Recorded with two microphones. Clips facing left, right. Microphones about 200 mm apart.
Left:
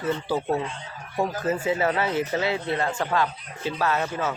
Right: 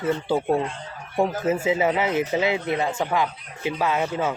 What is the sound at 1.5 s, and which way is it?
Speech, 15° right (ahead or behind).